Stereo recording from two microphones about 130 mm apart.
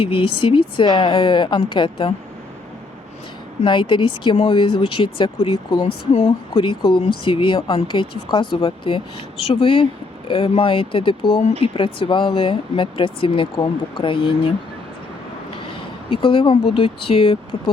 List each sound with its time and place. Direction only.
0.0 s speech: 40° left (ahead or behind)
3.6 s speech: 40° left (ahead or behind)
16.0 s speech: 40° left (ahead or behind)